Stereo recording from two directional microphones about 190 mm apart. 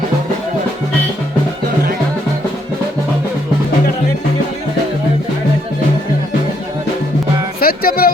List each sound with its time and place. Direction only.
7.6 s music: 50° left (ahead or behind)